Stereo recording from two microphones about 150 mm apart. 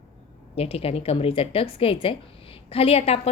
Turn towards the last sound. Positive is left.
turn(degrees=45)  # may be behind; listen again after turning